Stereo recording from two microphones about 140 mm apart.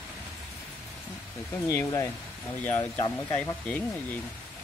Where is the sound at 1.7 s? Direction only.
20° left (ahead or behind).